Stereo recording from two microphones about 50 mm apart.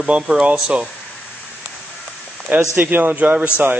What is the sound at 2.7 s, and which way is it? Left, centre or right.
Speech, right.